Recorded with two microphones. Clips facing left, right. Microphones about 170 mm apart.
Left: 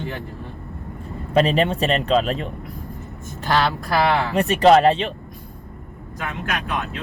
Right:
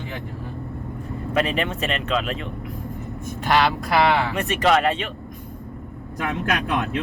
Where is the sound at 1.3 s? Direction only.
35° left (ahead or behind).